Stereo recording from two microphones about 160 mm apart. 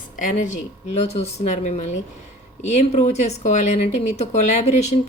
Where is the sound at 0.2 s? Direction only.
55° left (ahead or behind).